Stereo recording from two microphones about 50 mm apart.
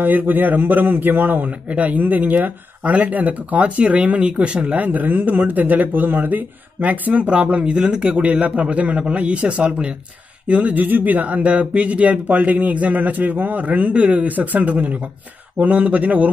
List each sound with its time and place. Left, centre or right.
0.0 s speech: right
10.5 s speech: right